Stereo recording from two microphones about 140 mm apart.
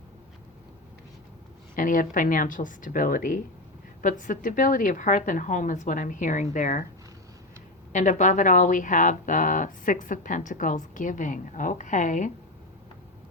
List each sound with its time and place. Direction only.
1.7 s a woman's voice: 70° left (ahead or behind)
7.9 s speech: 60° left (ahead or behind)